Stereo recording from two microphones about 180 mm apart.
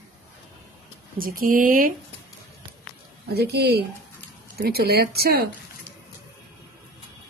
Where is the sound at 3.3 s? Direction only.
65° right (ahead or behind).